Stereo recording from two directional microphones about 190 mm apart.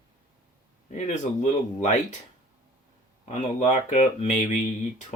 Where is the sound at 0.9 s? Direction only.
40° left (ahead or behind).